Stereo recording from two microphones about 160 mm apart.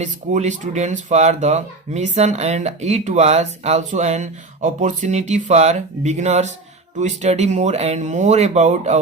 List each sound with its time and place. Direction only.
0.0 s speech: 45° right (ahead or behind)